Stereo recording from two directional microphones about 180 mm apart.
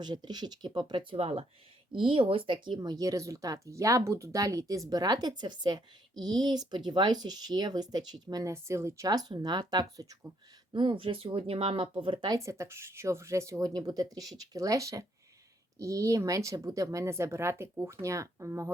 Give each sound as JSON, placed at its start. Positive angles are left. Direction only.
{"t": 0.0, "sound": "speech", "side_deg": -25}